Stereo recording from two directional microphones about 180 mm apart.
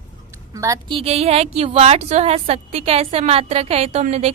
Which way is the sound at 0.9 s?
35° right (ahead or behind).